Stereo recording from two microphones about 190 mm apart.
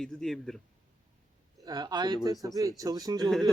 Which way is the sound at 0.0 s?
5° left (ahead or behind).